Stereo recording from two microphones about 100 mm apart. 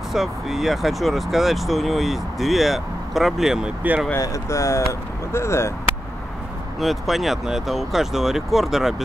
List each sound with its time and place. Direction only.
0.1 s speech: 5° right (ahead or behind)
4.2 s speech: 35° left (ahead or behind)
6.8 s speech: centre (ahead or behind)